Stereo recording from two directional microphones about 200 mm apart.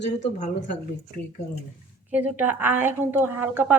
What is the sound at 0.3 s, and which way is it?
Speech, 35° left (ahead or behind).